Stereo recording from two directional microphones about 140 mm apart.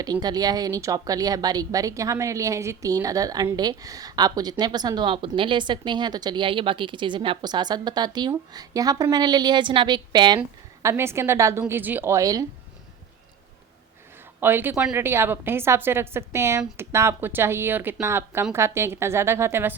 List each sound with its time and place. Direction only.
0.0 s a woman's voice: 30° right (ahead or behind)
10.8 s a woman's voice: 20° right (ahead or behind)
14.4 s a woman's voice: 15° right (ahead or behind)